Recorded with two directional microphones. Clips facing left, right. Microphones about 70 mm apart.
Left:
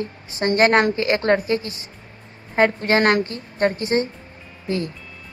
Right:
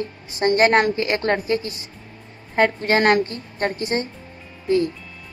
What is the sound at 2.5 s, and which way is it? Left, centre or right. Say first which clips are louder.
Speech: left 1 dB; centre.